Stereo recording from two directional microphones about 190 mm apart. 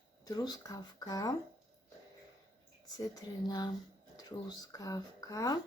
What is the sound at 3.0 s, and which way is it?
Speech, 20° left (ahead or behind).